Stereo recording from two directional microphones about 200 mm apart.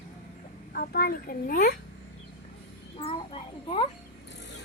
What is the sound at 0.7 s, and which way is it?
A child's voice, 50° left (ahead or behind).